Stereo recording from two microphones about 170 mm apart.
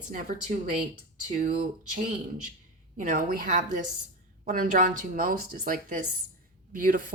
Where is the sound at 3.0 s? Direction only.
55° right (ahead or behind).